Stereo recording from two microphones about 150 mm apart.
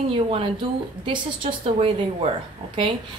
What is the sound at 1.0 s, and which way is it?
A woman's voice, 35° right (ahead or behind).